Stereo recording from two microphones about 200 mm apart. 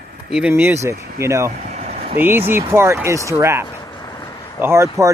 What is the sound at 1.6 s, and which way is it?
Vehicle, 35° right (ahead or behind).